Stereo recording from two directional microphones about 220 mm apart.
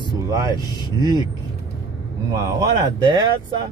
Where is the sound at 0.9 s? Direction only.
20° right (ahead or behind).